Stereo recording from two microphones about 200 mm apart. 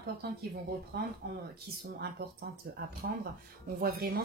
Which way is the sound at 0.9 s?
50° right (ahead or behind).